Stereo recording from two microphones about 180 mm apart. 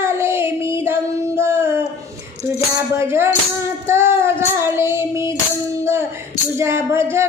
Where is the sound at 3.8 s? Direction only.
15° right (ahead or behind).